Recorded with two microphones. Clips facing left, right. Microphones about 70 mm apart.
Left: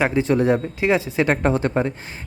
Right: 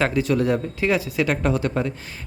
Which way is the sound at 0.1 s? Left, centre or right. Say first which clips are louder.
Left 3 dB; left.